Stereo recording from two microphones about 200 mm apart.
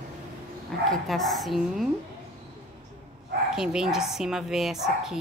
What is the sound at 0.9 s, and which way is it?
Speech, centre (ahead or behind).